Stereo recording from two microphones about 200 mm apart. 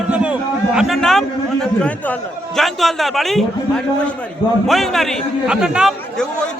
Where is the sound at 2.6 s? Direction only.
Centre (ahead or behind).